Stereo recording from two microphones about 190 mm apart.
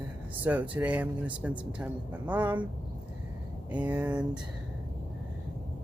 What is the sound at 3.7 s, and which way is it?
Speech, 10° right (ahead or behind).